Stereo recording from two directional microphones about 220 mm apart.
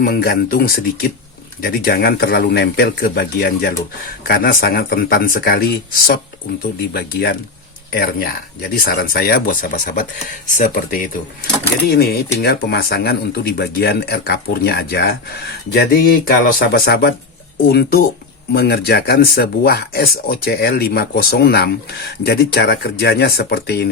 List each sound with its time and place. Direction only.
0.0 s speech: 45° left (ahead or behind)